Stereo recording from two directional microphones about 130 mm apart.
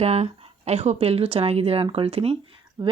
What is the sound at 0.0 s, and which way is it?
Speech, 55° right (ahead or behind).